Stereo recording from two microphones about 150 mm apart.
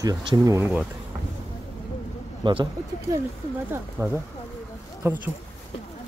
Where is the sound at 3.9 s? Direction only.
10° right (ahead or behind).